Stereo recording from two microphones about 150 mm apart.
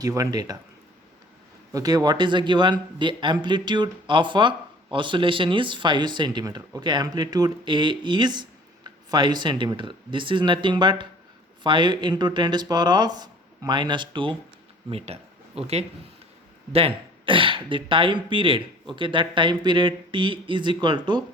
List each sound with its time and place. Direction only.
0.0 s speech: 25° right (ahead or behind)
1.7 s a man's voice: 25° right (ahead or behind)
14.8 s a man's voice: 45° right (ahead or behind)